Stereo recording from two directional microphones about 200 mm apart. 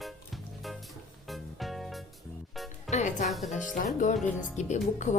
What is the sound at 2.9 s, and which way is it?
Speech, 35° left (ahead or behind).